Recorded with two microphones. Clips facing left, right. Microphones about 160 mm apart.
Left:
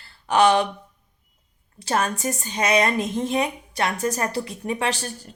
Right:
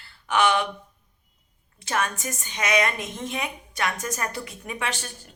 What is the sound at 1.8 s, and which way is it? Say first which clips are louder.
Speech: left 4 dB; 35° left (ahead or behind).